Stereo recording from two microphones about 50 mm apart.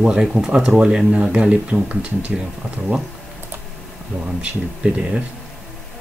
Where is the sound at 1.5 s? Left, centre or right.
Right.